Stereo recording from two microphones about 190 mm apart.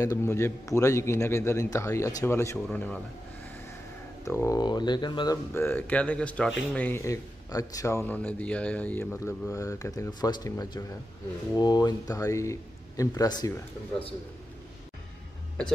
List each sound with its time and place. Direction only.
0.0 s a man's voice: 15° left (ahead or behind)
4.2 s a man's voice: 15° left (ahead or behind)